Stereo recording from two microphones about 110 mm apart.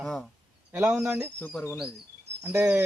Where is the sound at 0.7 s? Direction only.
25° right (ahead or behind).